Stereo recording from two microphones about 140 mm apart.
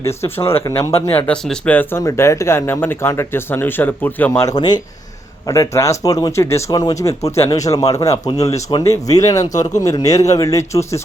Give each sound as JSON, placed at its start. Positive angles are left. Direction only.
{"t": 0.0, "sound": "speech", "side_deg": 20}